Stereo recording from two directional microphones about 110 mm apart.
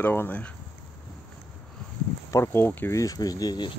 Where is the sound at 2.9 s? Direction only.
35° left (ahead or behind).